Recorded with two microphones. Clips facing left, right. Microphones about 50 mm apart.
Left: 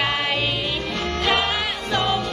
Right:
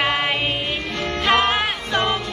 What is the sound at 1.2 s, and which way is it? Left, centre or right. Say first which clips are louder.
Music: right 5 dB; right.